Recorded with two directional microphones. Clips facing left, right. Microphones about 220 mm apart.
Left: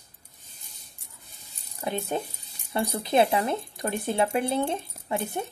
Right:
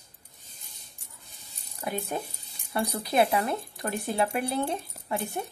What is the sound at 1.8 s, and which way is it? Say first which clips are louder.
Speech: left 3 dB; 25° left (ahead or behind).